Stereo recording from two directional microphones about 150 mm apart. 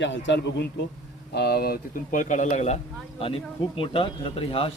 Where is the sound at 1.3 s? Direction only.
90° left; by 2.7 s 50° left (ahead or behind).